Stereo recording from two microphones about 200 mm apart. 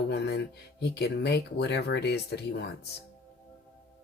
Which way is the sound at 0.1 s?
55° left (ahead or behind).